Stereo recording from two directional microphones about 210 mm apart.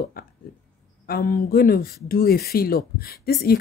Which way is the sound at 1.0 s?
45° left (ahead or behind).